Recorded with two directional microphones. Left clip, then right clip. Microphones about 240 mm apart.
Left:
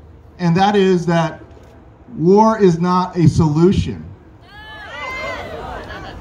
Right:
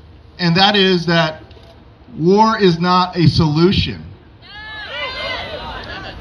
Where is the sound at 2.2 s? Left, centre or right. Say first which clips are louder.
Left 1 dB; centre.